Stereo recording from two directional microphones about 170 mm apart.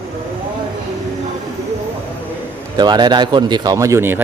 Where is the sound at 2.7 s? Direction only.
25° right (ahead or behind).